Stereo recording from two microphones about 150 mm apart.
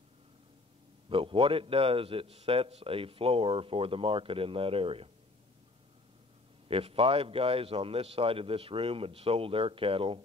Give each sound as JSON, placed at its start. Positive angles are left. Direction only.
{"t": 1.0, "sound": "a man's voice", "side_deg": -35}
{"t": 6.7, "sound": "a man's voice", "side_deg": -40}